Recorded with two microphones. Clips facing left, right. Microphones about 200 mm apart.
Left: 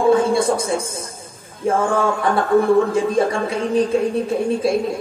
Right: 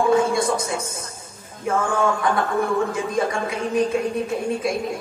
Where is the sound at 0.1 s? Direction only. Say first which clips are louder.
Left 3 dB; 30° left (ahead or behind).